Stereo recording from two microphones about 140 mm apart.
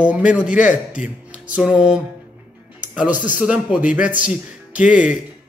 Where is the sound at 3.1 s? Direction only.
70° left (ahead or behind).